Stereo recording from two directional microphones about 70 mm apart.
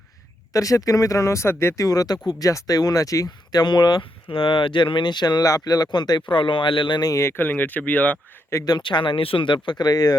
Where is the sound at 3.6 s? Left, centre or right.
Left.